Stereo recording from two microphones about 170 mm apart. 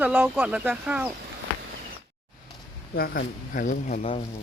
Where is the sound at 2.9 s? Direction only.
65° left (ahead or behind); by 4.0 s 50° left (ahead or behind).